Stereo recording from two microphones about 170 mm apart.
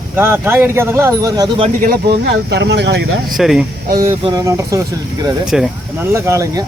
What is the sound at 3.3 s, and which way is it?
Speech, centre (ahead or behind).